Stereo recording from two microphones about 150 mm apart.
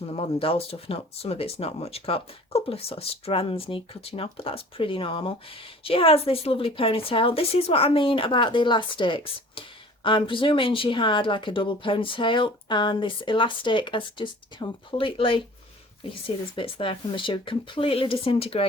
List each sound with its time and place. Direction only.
0.1 s speech: 40° left (ahead or behind)
16.6 s speech: 35° left (ahead or behind)